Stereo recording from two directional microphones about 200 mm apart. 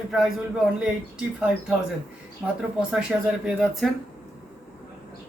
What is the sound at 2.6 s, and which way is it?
Speech, 5° right (ahead or behind).